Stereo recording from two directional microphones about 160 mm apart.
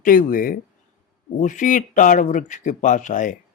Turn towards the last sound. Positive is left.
turn(degrees=55)  # may be behind; listen again after turning